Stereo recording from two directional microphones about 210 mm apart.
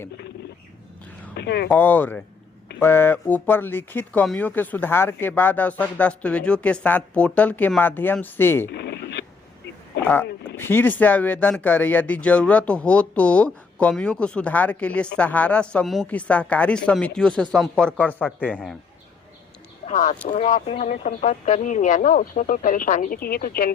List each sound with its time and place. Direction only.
1.4 s speech: 50° left (ahead or behind)
1.6 s speech: 10° left (ahead or behind)
8.7 s radio: 55° left (ahead or behind)
10.0 s a man's voice: 10° left (ahead or behind)
19.9 s speech: 35° left (ahead or behind)